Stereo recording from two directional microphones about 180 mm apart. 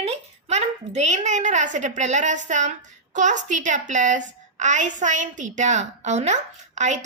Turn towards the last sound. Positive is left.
turn(degrees=-40)  # may be behind; listen again after turning